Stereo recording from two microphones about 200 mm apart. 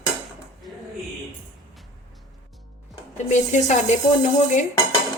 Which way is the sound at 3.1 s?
35° left (ahead or behind).